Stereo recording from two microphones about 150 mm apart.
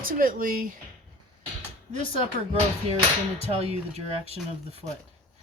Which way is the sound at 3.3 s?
45° right (ahead or behind).